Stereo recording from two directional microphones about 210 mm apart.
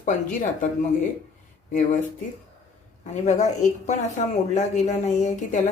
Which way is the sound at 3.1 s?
35° left (ahead or behind).